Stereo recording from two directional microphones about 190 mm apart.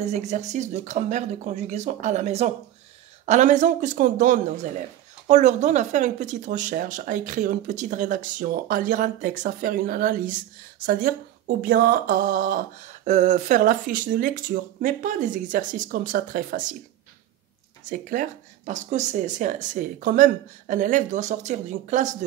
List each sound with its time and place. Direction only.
0.0 s a man's voice: 35° right (ahead or behind)
17.8 s a man's voice: 45° right (ahead or behind)